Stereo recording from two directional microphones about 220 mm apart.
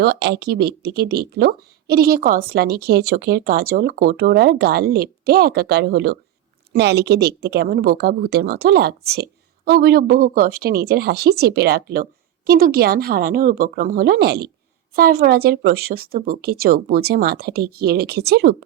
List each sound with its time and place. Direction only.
0.0 s speech: 50° right (ahead or behind)